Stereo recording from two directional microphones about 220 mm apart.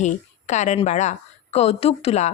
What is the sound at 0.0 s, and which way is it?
A woman's voice, 30° left (ahead or behind).